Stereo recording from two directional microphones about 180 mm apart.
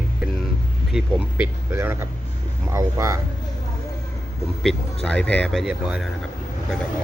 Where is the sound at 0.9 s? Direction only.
5° right (ahead or behind).